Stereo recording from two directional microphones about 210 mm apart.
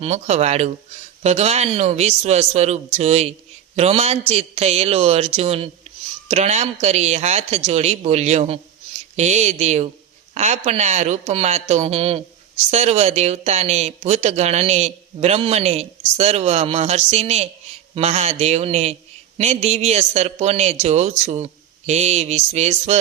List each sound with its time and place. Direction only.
0.0 s a man's voice: 30° right (ahead or behind)